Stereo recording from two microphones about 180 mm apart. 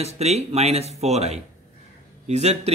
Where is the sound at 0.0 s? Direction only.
35° right (ahead or behind).